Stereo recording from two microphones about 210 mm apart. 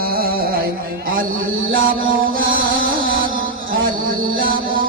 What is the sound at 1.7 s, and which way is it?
Music, 70° right (ahead or behind).